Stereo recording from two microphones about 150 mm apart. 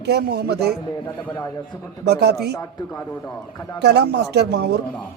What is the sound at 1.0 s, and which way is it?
Speech, 20° left (ahead or behind).